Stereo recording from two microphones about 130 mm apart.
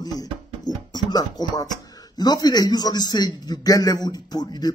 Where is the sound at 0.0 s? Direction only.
30° left (ahead or behind).